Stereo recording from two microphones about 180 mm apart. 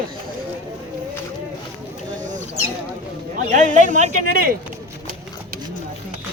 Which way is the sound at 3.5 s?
45° right (ahead or behind).